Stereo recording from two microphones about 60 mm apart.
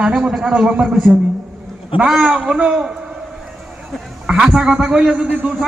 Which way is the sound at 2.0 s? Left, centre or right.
Centre.